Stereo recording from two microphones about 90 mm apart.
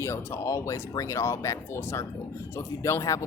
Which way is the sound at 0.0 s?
30° left (ahead or behind).